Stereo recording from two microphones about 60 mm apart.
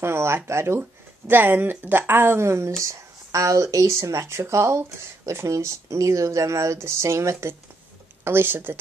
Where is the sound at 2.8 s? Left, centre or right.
Right.